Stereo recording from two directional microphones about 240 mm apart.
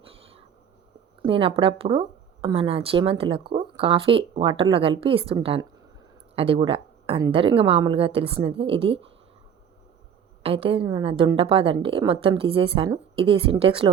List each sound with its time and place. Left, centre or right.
1.3 s speech: right
10.4 s speech: right